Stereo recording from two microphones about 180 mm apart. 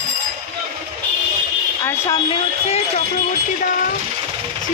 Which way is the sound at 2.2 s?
30° left (ahead or behind).